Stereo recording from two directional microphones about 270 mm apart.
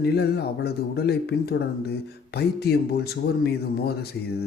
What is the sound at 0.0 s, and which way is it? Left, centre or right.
Speech, left.